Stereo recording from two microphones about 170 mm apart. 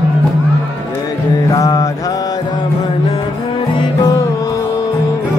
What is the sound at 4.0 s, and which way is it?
Music, 20° left (ahead or behind).